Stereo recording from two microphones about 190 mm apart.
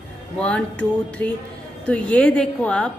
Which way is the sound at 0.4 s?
5° left (ahead or behind).